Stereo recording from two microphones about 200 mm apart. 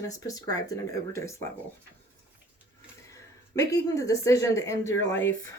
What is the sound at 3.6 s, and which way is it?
Speech, 15° left (ahead or behind).